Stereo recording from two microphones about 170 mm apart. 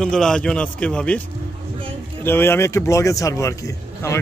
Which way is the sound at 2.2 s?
15° left (ahead or behind).